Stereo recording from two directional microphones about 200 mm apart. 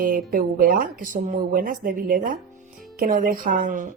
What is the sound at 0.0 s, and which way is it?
Speech, 45° right (ahead or behind).